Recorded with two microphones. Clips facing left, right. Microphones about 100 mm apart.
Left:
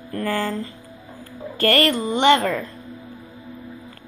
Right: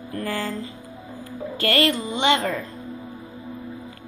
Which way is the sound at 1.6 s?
50° left (ahead or behind).